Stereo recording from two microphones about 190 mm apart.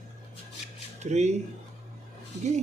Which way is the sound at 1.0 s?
35° right (ahead or behind).